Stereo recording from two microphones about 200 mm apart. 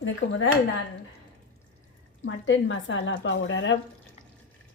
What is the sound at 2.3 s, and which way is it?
Speech, 70° left (ahead or behind).